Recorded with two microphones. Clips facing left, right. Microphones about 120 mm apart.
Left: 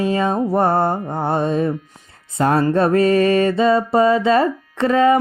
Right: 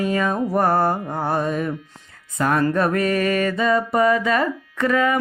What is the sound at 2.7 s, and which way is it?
Music, 30° left (ahead or behind).